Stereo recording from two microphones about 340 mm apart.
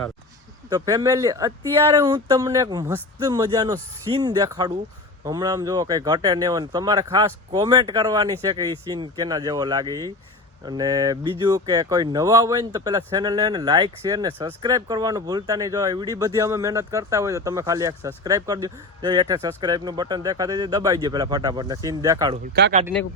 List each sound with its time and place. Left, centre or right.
0.7 s speech: centre
22.5 s speech: right